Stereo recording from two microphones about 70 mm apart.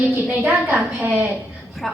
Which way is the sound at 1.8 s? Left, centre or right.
Centre.